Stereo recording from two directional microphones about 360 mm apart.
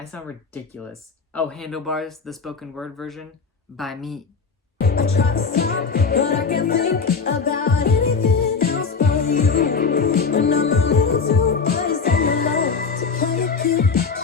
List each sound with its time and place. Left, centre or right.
1.3 s speech: centre
4.8 s music: left